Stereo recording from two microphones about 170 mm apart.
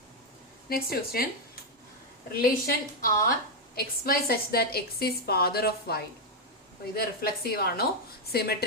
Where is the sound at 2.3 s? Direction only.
60° left (ahead or behind).